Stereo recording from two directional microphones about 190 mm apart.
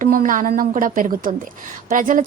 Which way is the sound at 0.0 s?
45° right (ahead or behind).